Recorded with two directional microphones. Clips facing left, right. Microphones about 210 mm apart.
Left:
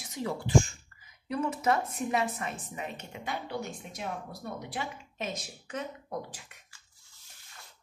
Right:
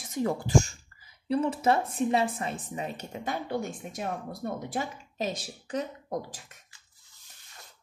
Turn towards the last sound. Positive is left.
turn(degrees=-40)  # may be behind; listen again after turning